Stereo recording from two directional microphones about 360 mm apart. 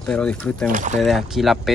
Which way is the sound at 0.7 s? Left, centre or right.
Right.